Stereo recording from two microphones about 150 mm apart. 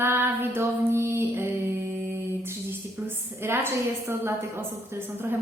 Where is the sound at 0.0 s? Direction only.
15° right (ahead or behind).